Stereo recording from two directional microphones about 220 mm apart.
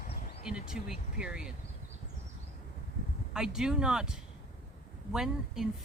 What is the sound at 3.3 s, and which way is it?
Speech, 5° right (ahead or behind).